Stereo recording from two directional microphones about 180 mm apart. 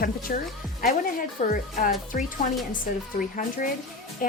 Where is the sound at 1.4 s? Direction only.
45° left (ahead or behind).